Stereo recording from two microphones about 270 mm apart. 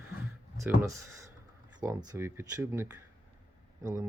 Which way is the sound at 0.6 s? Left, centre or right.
Centre.